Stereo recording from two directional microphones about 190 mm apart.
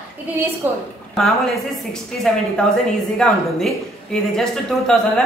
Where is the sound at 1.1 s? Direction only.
Centre (ahead or behind).